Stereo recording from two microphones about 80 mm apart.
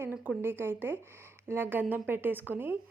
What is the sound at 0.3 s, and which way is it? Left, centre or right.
A woman's voice, right.